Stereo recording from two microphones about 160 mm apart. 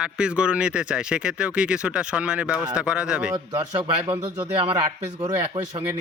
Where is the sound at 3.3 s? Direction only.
25° right (ahead or behind).